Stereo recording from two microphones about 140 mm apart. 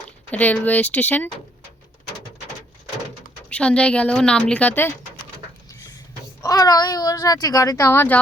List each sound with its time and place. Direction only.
0.3 s a woman's voice: 10° left (ahead or behind)
3.5 s a woman's voice: 10° left (ahead or behind)
6.4 s speech: 25° left (ahead or behind)